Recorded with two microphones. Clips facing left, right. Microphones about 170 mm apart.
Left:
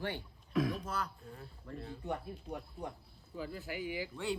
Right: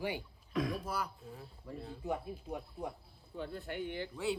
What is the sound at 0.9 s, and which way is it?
Speech, 10° right (ahead or behind).